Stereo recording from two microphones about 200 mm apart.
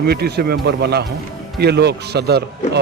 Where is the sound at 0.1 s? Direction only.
55° right (ahead or behind).